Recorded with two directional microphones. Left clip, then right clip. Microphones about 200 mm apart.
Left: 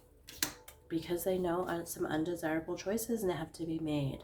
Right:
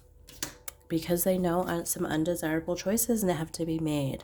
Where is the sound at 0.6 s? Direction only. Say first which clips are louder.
Right 7 dB; 55° right (ahead or behind).